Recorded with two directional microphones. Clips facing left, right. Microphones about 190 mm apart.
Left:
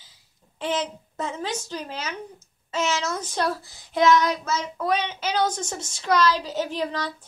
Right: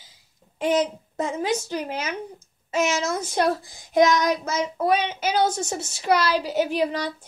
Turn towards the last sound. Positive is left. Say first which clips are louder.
# right 4 dB
turn(degrees=-15)  # may be behind; listen again after turning